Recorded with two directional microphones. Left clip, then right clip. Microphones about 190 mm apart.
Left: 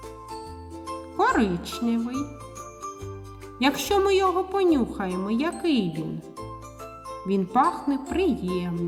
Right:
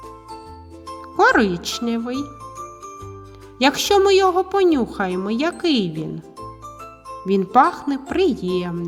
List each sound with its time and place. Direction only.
1.1 s a child's voice: 35° right (ahead or behind)
2.1 s jingle bell: centre (ahead or behind)
3.6 s speech: 30° right (ahead or behind)
7.3 s speech: 35° right (ahead or behind)